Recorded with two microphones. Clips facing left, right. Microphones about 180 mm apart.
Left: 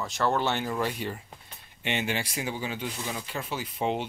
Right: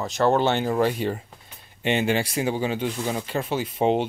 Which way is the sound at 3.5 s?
25° right (ahead or behind).